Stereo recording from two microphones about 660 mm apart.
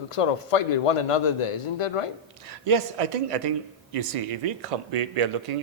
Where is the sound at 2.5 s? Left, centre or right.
Right.